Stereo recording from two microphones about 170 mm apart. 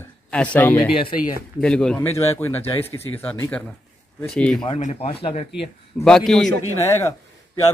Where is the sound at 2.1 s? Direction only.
40° left (ahead or behind).